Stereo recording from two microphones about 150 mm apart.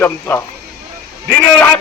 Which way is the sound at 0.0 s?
15° left (ahead or behind).